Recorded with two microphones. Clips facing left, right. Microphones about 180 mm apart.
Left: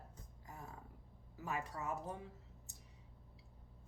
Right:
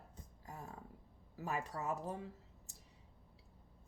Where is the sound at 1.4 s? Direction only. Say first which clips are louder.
Right 2 dB; 35° right (ahead or behind).